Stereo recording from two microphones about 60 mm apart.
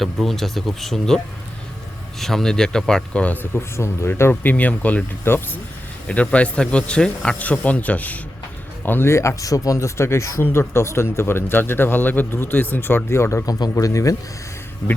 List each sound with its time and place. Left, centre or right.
0.0 s a man's voice: centre
3.4 s speech: left
4.2 s speech: left
5.2 s speech: left
6.1 s a man's voice: left
7.3 s speech: left
9.0 s speech: left
10.4 s speech: left
13.1 s speech: left
13.4 s speech: left